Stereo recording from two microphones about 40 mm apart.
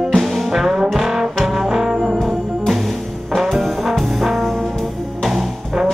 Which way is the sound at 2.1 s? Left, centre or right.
Centre.